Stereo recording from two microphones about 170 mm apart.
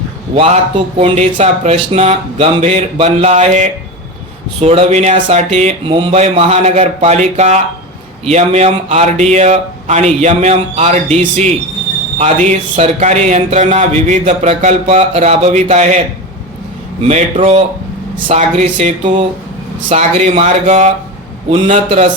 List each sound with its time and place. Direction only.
0.3 s speech: 35° right (ahead or behind)
17.0 s speech: 35° right (ahead or behind)